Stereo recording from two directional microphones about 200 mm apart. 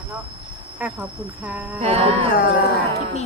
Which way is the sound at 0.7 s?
10° right (ahead or behind).